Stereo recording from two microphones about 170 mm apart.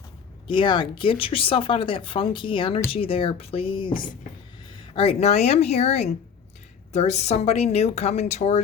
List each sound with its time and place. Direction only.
0.4 s speech: 30° left (ahead or behind)
4.9 s speech: 35° left (ahead or behind)